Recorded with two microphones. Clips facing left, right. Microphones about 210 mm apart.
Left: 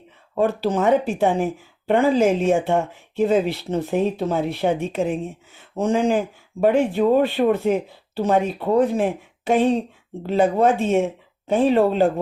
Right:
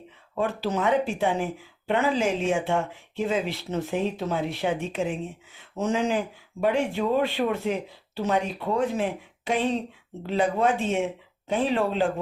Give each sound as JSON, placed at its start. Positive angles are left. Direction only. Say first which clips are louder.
{"t": 0.4, "sound": "speech", "louder": "left 6 dB", "side_deg": 50}